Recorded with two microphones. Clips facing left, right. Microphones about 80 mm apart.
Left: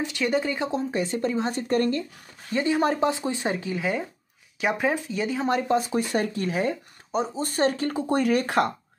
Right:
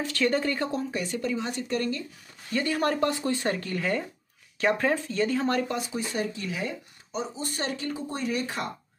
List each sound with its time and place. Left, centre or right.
0.0 s speech: centre; by 2.0 s left
2.5 s speech: centre
5.9 s speech: left